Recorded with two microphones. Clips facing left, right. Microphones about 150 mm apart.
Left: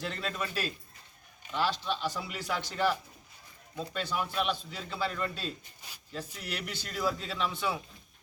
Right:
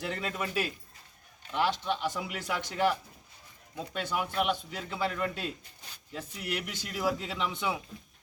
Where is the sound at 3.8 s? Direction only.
15° right (ahead or behind).